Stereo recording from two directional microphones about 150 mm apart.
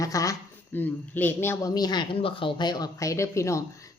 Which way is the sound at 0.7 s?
10° left (ahead or behind).